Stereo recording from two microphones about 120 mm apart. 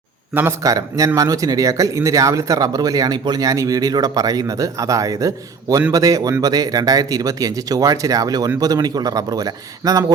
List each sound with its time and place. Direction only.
0.6 s speech: 30° right (ahead or behind)